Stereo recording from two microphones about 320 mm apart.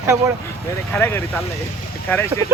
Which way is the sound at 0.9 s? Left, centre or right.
Centre.